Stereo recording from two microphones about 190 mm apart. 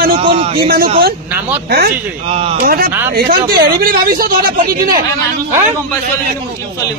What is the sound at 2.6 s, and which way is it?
Speech, 50° right (ahead or behind).